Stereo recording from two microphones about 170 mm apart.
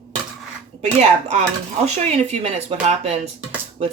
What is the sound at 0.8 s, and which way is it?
Speech, 40° right (ahead or behind).